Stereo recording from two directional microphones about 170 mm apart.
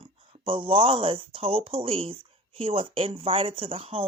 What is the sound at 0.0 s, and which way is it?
Speech, 30° right (ahead or behind).